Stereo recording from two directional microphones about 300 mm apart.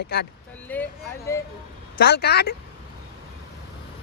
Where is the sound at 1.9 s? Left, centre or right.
Left.